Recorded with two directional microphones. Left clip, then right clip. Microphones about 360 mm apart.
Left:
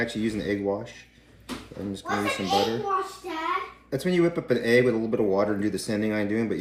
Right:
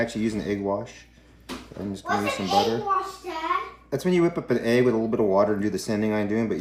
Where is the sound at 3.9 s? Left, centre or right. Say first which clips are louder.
Right 1 dB; centre.